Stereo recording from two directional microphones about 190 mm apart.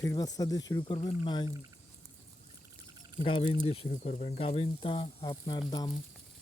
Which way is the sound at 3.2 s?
30° left (ahead or behind).